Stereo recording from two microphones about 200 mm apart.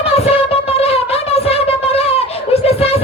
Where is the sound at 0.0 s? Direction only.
30° left (ahead or behind).